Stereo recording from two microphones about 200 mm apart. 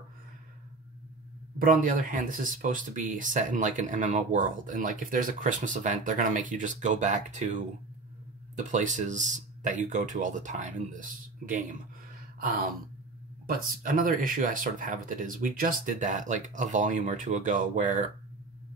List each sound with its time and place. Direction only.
1.6 s speech: 45° right (ahead or behind)
12.4 s gasp: 45° right (ahead or behind)
13.5 s speech: 45° right (ahead or behind)